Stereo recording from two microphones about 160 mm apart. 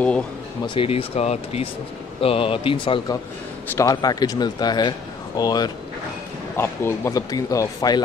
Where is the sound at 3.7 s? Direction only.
20° left (ahead or behind).